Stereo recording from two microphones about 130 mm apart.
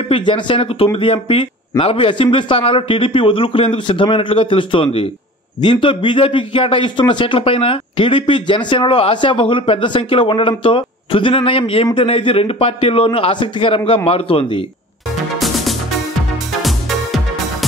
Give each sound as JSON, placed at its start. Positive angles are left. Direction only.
{"t": 0.1, "sound": "a man's voice", "side_deg": 40}
{"t": 16.6, "sound": "music", "side_deg": 0}